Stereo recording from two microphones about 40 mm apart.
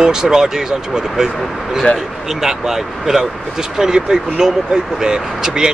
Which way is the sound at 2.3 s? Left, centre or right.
Centre.